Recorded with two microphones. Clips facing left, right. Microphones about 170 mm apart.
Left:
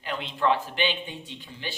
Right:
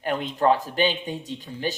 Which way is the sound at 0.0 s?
45° right (ahead or behind).